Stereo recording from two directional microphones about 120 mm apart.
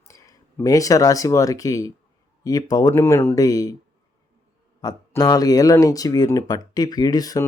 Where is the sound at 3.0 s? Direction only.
20° left (ahead or behind).